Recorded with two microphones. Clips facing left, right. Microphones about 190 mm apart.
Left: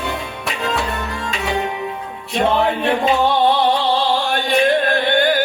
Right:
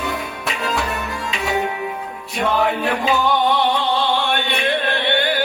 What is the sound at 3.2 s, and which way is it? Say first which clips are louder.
Opera: left 2 dB; 35° left (ahead or behind).